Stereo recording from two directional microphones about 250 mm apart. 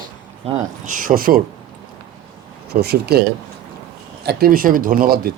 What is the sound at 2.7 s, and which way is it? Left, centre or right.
Speech, right.